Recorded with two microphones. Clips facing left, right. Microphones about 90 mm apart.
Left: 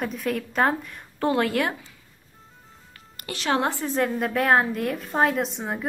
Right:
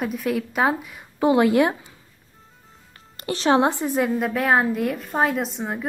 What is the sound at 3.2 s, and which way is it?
Speech, 30° right (ahead or behind).